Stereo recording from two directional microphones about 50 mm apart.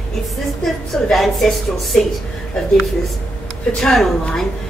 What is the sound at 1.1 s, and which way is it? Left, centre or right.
Speech, centre.